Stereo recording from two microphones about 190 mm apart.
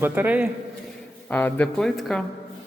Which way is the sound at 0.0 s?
10° right (ahead or behind).